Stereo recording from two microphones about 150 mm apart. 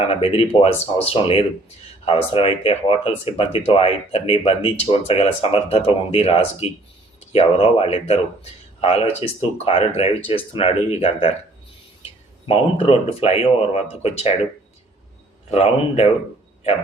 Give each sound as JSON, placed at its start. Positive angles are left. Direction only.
{"t": 0.1, "sound": "speech", "side_deg": 40}
{"t": 12.5, "sound": "speech", "side_deg": 40}
{"t": 15.4, "sound": "speech", "side_deg": 45}